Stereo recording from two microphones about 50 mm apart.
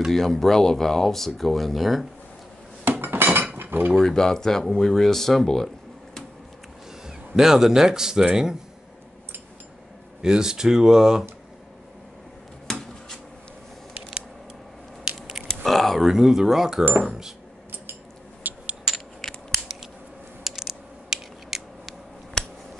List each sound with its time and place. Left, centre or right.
0.1 s speech: centre
2.8 s dishes: right
3.5 s cutlery: right
3.9 s speech: centre
7.1 s a man's voice: centre
10.2 s speech: centre
12.6 s a sound: centre
15.1 s burping: centre
15.4 s biting: centre
16.0 s speech: centre
18.4 s a sound: right
20.4 s mechanisms: centre
22.4 s scissors: centre